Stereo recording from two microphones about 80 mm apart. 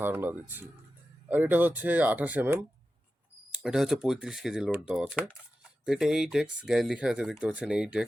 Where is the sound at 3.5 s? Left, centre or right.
Centre.